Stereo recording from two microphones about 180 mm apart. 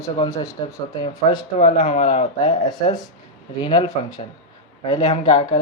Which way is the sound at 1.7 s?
45° left (ahead or behind).